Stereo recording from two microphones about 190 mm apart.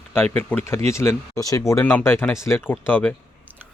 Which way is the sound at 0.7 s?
15° left (ahead or behind).